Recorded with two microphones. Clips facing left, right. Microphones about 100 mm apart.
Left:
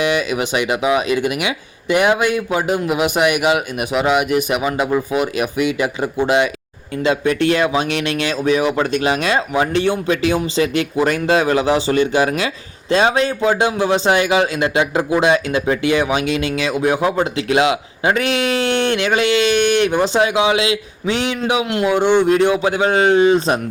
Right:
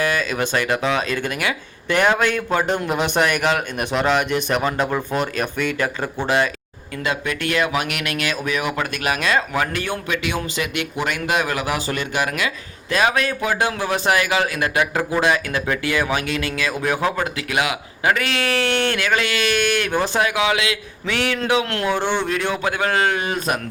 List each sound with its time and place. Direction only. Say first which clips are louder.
0.0 s speech: left 3 dB; 20° left (ahead or behind)
6.9 s a man's voice: left 7 dB; 30° left (ahead or behind)
10.1 s a man's voice: left 7 dB; 35° left (ahead or behind)